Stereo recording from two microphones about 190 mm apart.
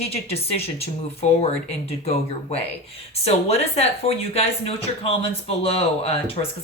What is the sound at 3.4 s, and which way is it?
Speech, 35° left (ahead or behind).